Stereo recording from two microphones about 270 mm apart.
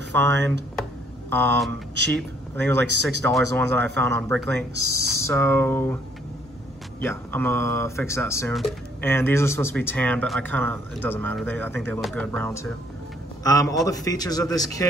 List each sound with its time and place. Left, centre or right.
0.1 s speech: centre
1.7 s speech: right
2.1 s speech: centre
7.0 s a man's voice: centre